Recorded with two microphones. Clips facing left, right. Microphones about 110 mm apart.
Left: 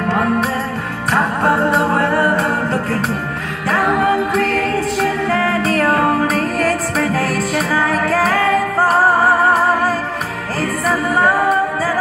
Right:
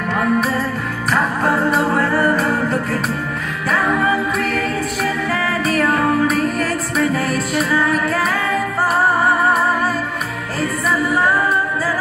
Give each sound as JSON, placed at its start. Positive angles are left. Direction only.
{"t": 0.1, "sound": "music", "side_deg": 30}
{"t": 4.0, "sound": "music", "side_deg": 60}
{"t": 5.5, "sound": "music", "side_deg": 35}
{"t": 7.3, "sound": "music", "side_deg": 40}
{"t": 10.9, "sound": "music", "side_deg": 50}